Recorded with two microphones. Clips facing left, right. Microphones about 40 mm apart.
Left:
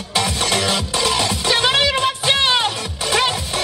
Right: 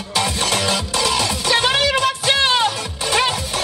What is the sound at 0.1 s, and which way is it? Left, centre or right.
Music, left.